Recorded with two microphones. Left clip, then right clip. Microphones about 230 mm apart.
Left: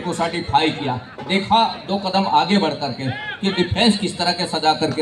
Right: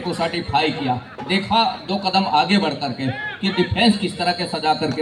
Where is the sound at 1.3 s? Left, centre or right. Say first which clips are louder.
Left 2 dB; centre.